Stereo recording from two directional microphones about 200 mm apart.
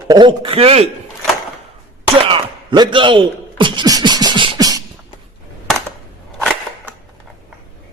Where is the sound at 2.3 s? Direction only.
25° right (ahead or behind).